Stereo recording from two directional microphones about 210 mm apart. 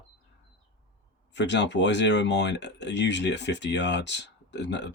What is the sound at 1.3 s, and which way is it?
Speech, 55° left (ahead or behind).